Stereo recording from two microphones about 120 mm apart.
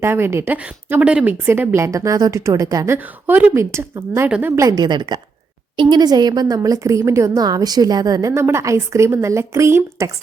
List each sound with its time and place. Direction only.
0.0 s a woman's voice: 20° right (ahead or behind)
4.3 s a woman's voice: 15° right (ahead or behind)
4.5 s a woman's voice: 25° right (ahead or behind)